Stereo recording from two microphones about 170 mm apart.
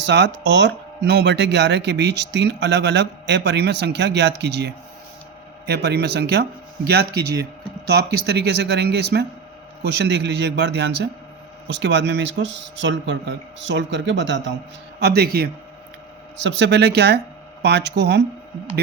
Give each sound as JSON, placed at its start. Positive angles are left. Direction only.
{"t": 0.0, "sound": "speech", "side_deg": -90}
{"t": 10.0, "sound": "speech", "side_deg": -90}
{"t": 14.9, "sound": "speech", "side_deg": -70}
{"t": 16.4, "sound": "speech", "side_deg": -90}
{"t": 17.6, "sound": "speech", "side_deg": -85}